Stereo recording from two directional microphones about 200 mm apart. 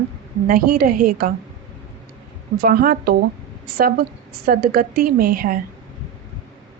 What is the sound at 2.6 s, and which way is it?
A woman's voice, 45° right (ahead or behind).